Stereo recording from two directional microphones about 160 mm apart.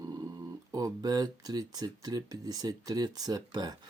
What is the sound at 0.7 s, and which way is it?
Speech, 25° right (ahead or behind).